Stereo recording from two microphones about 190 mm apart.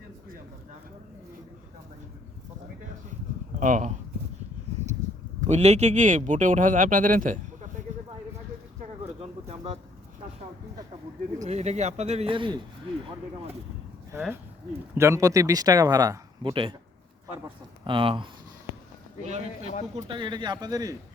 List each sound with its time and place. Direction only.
3.6 s speech: 40° right (ahead or behind)
5.4 s speech: 35° right (ahead or behind)
9.2 s bird: 35° right (ahead or behind)
11.4 s speech: 35° right (ahead or behind)
14.1 s speech: 15° right (ahead or behind)
17.8 s speech: 30° right (ahead or behind)
20.0 s speech: 25° right (ahead or behind)